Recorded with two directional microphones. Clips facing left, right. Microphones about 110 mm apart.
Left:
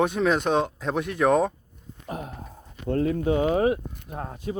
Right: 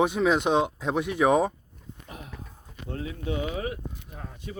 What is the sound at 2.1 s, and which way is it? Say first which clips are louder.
Speech: left 9 dB; 45° left (ahead or behind).